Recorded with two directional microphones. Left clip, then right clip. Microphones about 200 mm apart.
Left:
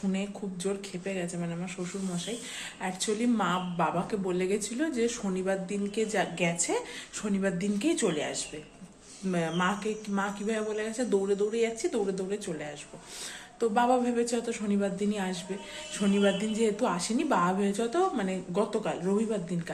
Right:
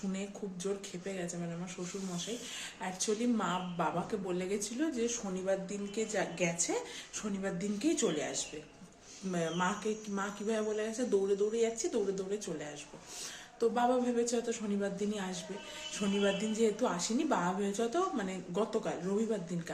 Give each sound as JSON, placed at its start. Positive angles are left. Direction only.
{"t": 0.1, "sound": "speech", "side_deg": -5}
{"t": 2.8, "sound": "speech", "side_deg": 0}
{"t": 13.6, "sound": "speech", "side_deg": -5}